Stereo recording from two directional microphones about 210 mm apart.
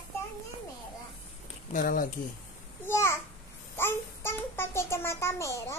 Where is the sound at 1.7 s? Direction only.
40° left (ahead or behind).